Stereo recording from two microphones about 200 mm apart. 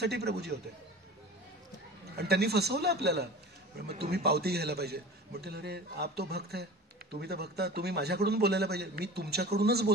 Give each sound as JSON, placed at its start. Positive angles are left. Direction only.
{"t": 0.0, "sound": "a man's voice", "side_deg": -55}
{"t": 2.1, "sound": "a man's voice", "side_deg": -55}